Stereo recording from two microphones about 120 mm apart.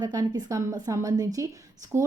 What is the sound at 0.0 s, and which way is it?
Speech, 35° right (ahead or behind).